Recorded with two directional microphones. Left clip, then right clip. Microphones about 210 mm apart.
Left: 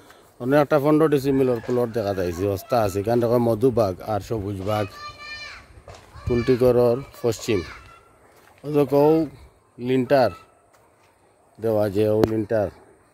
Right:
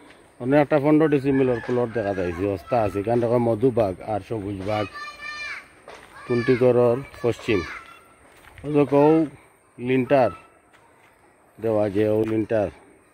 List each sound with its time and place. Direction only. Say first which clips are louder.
0.4 s speech: left 1 dB; 15° left (ahead or behind)
6.2 s speech: even; 15° left (ahead or behind)
11.6 s speech: left 1 dB; 10° left (ahead or behind)